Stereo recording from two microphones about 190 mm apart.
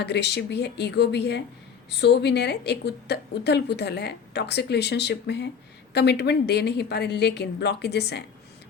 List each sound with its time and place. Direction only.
0.0 s a woman's voice: 60° left (ahead or behind)